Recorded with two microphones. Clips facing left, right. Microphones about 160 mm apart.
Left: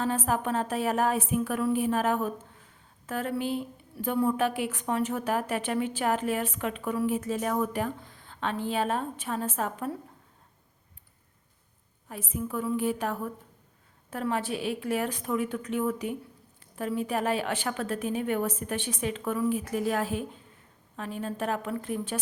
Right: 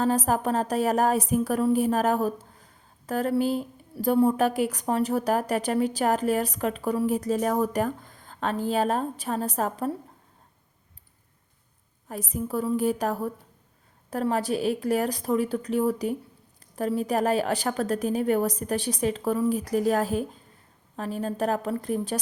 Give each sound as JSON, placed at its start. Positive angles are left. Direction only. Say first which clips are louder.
{"t": 0.0, "sound": "a woman's voice", "louder": "right 4 dB", "side_deg": -40}
{"t": 12.0, "sound": "a woman's voice", "louder": "right 3 dB", "side_deg": -40}